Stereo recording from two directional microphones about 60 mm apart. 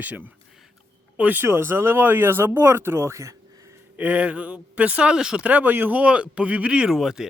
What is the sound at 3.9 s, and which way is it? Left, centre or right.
Speech, right.